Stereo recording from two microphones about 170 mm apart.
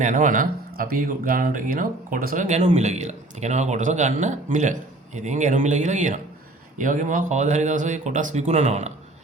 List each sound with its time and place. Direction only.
0.0 s speech: 50° right (ahead or behind)